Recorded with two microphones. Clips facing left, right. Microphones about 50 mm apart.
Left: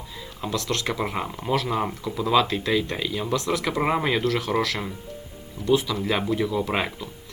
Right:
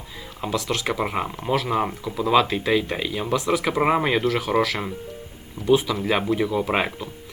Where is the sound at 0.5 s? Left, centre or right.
Centre.